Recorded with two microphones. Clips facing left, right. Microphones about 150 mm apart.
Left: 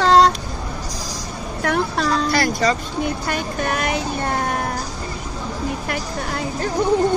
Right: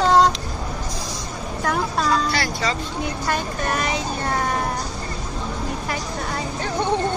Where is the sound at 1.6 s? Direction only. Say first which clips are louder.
Left 2 dB; 65° left (ahead or behind).